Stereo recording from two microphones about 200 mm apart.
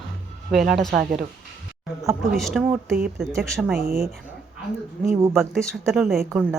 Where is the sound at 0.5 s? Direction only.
Centre (ahead or behind).